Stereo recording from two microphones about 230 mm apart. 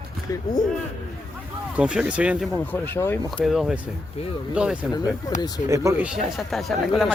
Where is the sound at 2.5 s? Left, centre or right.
Centre.